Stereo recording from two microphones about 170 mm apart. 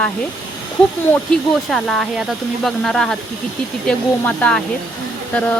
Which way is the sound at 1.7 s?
Centre (ahead or behind).